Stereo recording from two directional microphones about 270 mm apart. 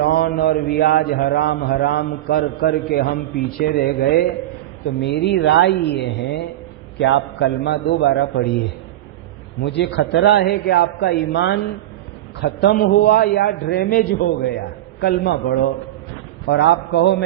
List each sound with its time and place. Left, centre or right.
0.0 s mantra: left
9.6 s mantra: left